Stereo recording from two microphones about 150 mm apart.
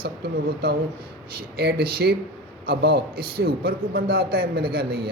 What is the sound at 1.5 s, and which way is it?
A man's voice, 90° right.